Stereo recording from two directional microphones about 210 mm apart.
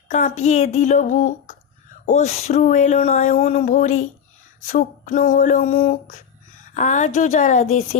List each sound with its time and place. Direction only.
0.1 s speech: 35° left (ahead or behind)